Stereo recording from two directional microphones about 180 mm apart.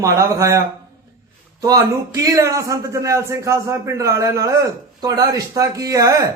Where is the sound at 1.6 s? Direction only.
20° right (ahead or behind).